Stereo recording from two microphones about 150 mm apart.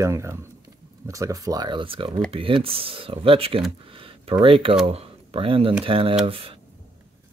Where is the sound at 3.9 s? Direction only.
35° right (ahead or behind).